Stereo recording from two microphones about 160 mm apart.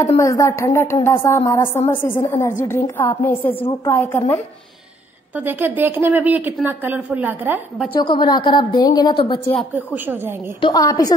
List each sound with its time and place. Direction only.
0.2 s a woman's voice: 20° left (ahead or behind)
5.4 s speech: 15° right (ahead or behind)
7.9 s a woman's voice: 30° left (ahead or behind)
10.6 s a woman's voice: 20° left (ahead or behind)